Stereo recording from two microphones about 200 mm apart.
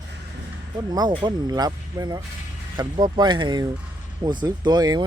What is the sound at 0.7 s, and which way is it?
A man's voice, 20° right (ahead or behind).